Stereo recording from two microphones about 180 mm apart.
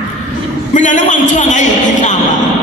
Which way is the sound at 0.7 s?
45° left (ahead or behind).